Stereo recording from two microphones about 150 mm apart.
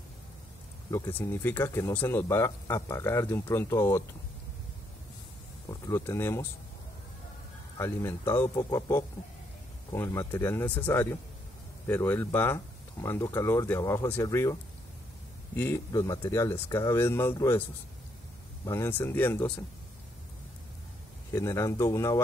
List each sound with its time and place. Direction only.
0.8 s speech: 20° left (ahead or behind)
5.7 s speech: 20° left (ahead or behind)
7.8 s speech: 15° left (ahead or behind)
18.7 s speech: 15° left (ahead or behind)
21.3 s speech: 20° left (ahead or behind)